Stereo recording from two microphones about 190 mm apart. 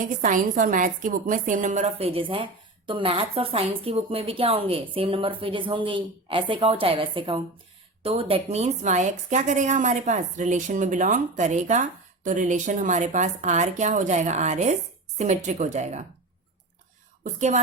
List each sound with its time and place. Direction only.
0.2 s a woman's voice: 45° right (ahead or behind)
17.2 s a woman's voice: 40° right (ahead or behind)